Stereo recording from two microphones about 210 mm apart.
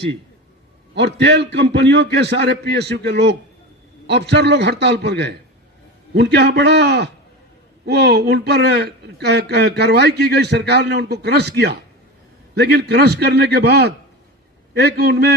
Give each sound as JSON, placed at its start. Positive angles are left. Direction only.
{"t": 0.9, "sound": "a man's voice", "side_deg": -55}